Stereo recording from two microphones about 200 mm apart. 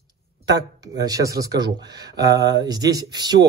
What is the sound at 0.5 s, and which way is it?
A man's voice, 20° right (ahead or behind).